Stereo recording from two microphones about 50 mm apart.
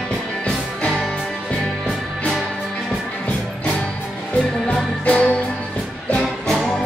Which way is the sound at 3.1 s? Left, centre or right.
Left.